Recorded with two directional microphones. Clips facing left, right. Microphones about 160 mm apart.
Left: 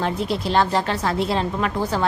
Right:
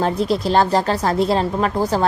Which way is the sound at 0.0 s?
40° right (ahead or behind).